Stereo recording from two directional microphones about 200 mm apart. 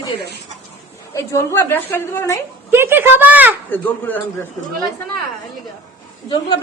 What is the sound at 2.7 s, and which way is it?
Speech, 10° right (ahead or behind).